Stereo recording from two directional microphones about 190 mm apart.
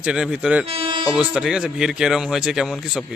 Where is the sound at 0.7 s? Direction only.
30° right (ahead or behind).